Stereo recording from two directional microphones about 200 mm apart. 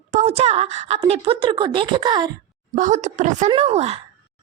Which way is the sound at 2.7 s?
35° right (ahead or behind).